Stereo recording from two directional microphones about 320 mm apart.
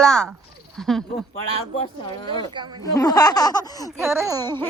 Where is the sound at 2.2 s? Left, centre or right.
Centre.